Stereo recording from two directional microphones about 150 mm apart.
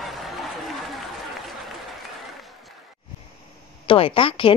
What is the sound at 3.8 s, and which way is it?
Speech, 35° left (ahead or behind).